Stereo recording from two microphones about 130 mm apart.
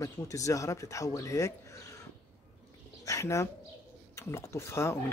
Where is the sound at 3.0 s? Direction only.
25° left (ahead or behind).